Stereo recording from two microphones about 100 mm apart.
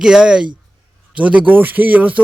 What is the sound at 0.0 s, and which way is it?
A man's voice, 5° right (ahead or behind).